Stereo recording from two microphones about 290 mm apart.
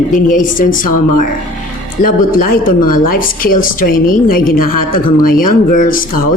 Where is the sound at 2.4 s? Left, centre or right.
Left.